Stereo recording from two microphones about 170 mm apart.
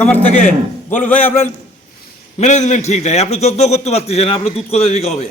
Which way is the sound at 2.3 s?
45° left (ahead or behind).